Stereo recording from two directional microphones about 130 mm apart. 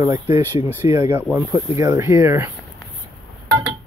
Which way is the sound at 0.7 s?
25° right (ahead or behind).